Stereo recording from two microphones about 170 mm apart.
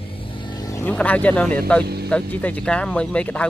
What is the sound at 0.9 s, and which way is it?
Speech, 10° left (ahead or behind).